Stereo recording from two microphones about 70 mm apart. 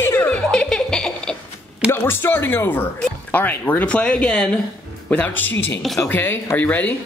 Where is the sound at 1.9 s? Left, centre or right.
Left.